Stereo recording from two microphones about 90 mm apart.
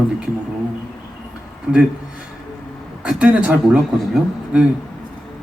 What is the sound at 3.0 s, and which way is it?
Speech, 10° right (ahead or behind).